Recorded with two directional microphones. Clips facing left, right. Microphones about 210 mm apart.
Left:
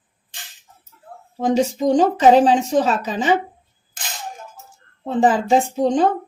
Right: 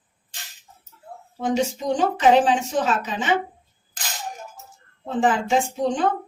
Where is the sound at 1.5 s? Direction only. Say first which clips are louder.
Left 5 dB; 40° left (ahead or behind).